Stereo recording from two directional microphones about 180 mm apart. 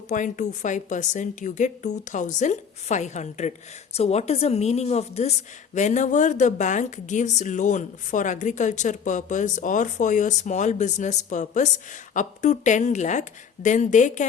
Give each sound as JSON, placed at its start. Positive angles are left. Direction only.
{"t": 0.1, "sound": "a woman's voice", "side_deg": 45}